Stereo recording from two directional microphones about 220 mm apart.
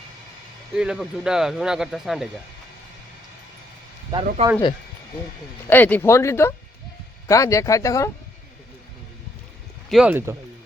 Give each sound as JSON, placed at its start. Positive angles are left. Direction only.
{"t": 0.7, "sound": "speech", "side_deg": -5}
{"t": 4.4, "sound": "speech", "side_deg": -30}
{"t": 5.6, "sound": "speech", "side_deg": 10}
{"t": 9.9, "sound": "speech", "side_deg": -5}